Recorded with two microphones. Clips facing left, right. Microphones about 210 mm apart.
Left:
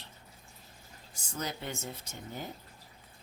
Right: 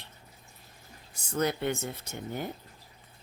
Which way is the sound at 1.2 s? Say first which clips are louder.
Right 9 dB; 60° right (ahead or behind).